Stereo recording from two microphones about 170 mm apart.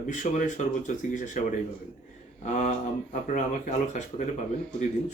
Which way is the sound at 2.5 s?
45° left (ahead or behind).